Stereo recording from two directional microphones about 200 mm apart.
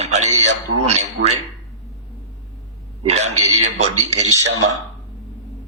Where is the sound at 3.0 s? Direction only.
35° right (ahead or behind).